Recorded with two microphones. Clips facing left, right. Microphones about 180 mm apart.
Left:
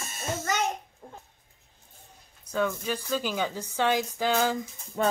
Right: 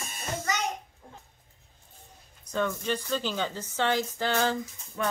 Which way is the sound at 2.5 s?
5° left (ahead or behind).